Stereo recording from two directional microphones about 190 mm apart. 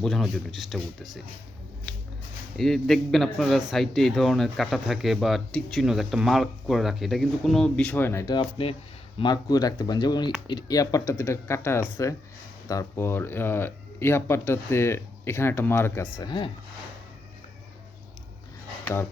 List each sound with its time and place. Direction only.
0.0 s a man's voice: centre (ahead or behind)
2.6 s a man's voice: centre (ahead or behind); by 16.5 s 25° left (ahead or behind)